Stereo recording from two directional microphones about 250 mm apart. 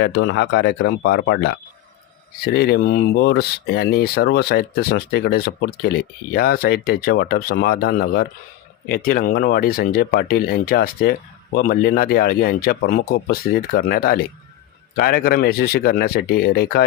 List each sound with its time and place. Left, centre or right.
0.0 s speech: left